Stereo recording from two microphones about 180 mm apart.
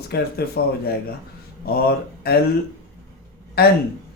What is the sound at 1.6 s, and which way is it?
Speech, 60° left (ahead or behind).